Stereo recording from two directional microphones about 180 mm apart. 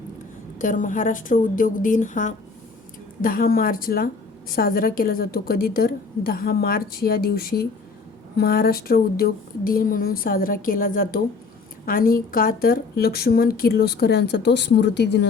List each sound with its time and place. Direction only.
0.6 s a woman's voice: 45° left (ahead or behind); by 15.3 s 70° left (ahead or behind)